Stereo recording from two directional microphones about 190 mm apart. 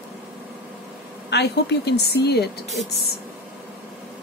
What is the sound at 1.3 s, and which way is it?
A woman's voice, 60° left (ahead or behind).